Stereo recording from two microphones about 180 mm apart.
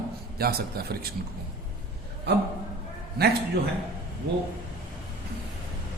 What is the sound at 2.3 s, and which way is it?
Speech, 65° right (ahead or behind).